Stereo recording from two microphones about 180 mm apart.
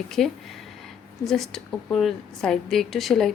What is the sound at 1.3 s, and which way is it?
Speech, centre (ahead or behind).